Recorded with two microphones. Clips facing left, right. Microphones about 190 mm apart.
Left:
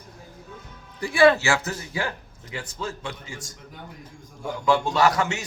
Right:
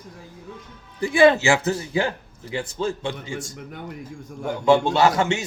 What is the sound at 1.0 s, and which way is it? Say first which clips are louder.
A man's voice: right 2 dB; 20° right (ahead or behind).